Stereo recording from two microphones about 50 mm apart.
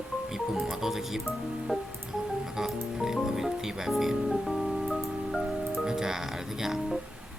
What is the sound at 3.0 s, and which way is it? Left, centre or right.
Music, centre.